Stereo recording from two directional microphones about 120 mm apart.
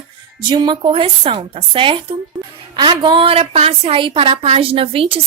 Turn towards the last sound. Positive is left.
turn(degrees=-50)  # may be behind; listen again after turning